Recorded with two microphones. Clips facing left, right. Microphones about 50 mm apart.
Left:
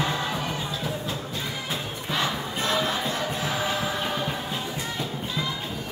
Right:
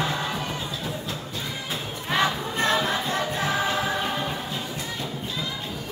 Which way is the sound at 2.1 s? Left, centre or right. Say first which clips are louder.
Right 4 dB; right.